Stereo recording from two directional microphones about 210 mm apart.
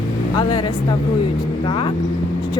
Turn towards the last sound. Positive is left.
turn(degrees=20)  # may be behind; listen again after turning